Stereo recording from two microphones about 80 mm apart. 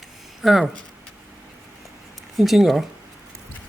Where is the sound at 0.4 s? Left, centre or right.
Centre.